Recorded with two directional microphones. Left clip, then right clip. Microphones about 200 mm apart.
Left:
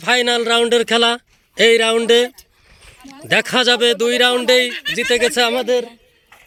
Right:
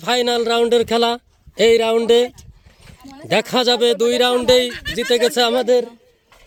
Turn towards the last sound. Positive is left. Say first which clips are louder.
# right 1 dB
turn(degrees=-15)  # may be behind; listen again after turning